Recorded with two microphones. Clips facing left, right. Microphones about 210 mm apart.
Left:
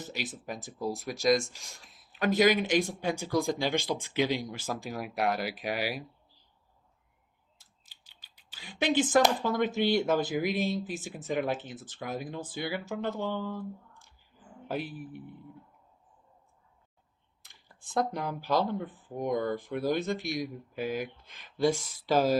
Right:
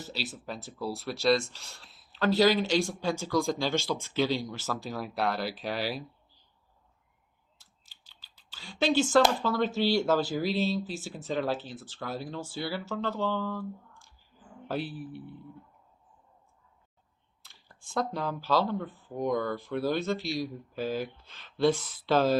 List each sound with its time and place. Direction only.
0.0 s speech: 15° left (ahead or behind)
8.0 s a sound: 15° left (ahead or behind)
9.1 s speech: 20° left (ahead or behind)
17.4 s speech: 15° left (ahead or behind)